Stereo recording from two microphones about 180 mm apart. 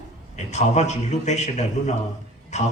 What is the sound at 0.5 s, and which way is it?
A man's voice, 40° left (ahead or behind).